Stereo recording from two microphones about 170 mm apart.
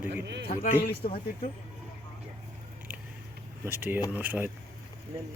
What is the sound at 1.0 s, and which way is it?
Speech, 35° left (ahead or behind).